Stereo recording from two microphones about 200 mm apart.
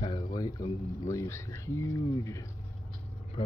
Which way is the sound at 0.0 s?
20° left (ahead or behind).